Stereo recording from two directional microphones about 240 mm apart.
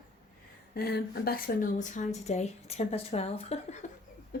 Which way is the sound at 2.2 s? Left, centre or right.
Left.